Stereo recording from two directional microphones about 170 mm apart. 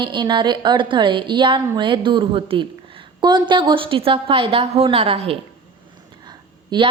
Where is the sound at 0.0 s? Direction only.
25° right (ahead or behind).